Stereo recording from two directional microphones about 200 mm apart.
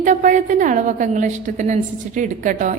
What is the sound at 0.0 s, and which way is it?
A woman's voice, 40° right (ahead or behind).